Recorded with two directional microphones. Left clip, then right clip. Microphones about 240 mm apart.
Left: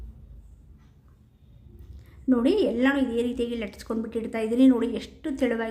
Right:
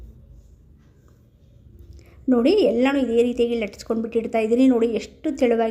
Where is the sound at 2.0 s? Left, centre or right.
Centre.